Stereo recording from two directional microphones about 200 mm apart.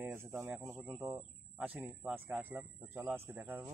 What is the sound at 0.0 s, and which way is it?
Speech, 10° right (ahead or behind).